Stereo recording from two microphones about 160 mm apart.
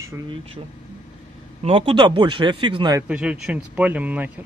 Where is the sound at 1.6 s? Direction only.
35° right (ahead or behind).